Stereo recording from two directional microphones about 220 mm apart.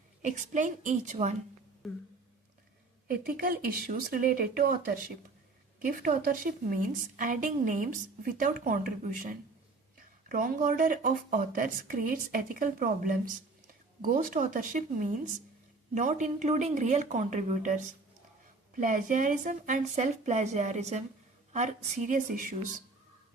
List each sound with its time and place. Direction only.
0.2 s a woman's voice: 35° right (ahead or behind)
3.1 s a woman's voice: 40° right (ahead or behind)